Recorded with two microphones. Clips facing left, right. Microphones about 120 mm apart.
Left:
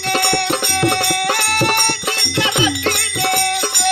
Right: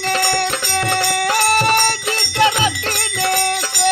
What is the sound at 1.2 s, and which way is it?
Music, 40° right (ahead or behind).